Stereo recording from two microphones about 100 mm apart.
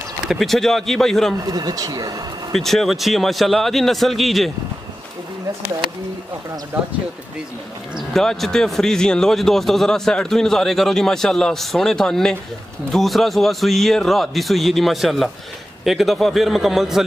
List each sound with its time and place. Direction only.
0.2 s a man's voice: centre (ahead or behind)
1.4 s speech: 40° right (ahead or behind)
2.5 s a man's voice: 5° left (ahead or behind)
8.1 s a man's voice: 5° left (ahead or behind)